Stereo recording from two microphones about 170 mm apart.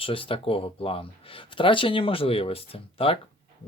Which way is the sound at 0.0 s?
30° left (ahead or behind).